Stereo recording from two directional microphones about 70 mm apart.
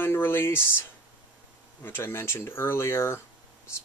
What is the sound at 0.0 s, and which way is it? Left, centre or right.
Speech, left.